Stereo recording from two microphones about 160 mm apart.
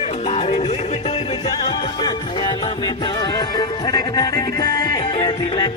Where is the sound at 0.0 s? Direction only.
40° left (ahead or behind).